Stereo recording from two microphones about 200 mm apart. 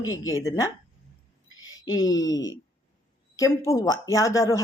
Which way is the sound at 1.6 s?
20° left (ahead or behind).